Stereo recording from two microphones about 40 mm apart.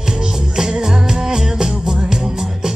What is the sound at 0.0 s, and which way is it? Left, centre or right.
Music, centre.